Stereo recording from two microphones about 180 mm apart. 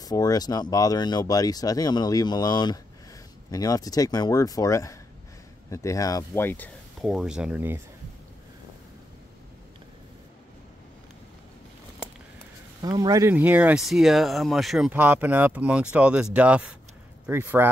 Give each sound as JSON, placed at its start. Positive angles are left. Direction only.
{"t": 0.0, "sound": "speech", "side_deg": 20}
{"t": 7.1, "sound": "speech", "side_deg": -5}
{"t": 12.8, "sound": "speech", "side_deg": -20}